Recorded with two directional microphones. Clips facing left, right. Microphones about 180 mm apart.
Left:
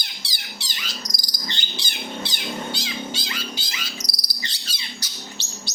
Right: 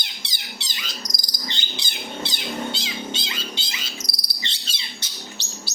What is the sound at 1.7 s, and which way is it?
Cat, 20° right (ahead or behind).